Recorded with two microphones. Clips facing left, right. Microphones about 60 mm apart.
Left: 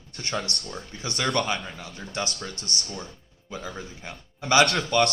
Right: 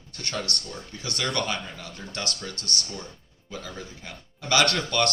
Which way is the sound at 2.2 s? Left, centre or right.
Left.